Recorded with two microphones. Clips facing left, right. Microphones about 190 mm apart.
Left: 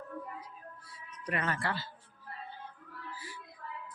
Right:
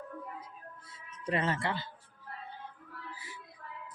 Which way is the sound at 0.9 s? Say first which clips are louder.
Right 4 dB; 25° right (ahead or behind).